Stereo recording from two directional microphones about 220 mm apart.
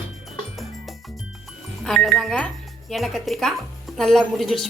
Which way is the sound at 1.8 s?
Centre (ahead or behind).